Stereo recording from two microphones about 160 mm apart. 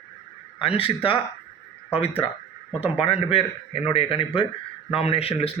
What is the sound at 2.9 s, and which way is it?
A man's voice, 35° left (ahead or behind).